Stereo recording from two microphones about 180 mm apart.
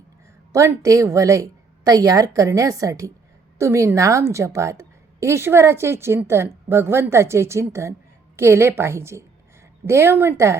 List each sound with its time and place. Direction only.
0.5 s a woman's voice: 15° right (ahead or behind)